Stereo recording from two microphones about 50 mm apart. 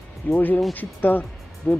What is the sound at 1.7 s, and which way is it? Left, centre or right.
Speech, left.